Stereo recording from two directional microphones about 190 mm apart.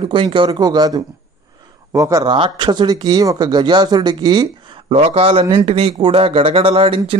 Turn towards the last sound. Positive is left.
turn(degrees=-30)  # may be behind; listen again after turning